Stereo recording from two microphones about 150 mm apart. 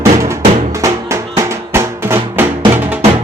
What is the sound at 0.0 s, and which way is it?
Music, 20° right (ahead or behind).